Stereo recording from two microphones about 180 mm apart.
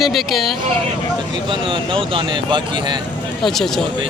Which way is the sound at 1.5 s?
30° right (ahead or behind).